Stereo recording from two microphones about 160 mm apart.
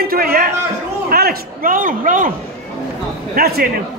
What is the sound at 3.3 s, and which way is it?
Speech, 70° right (ahead or behind).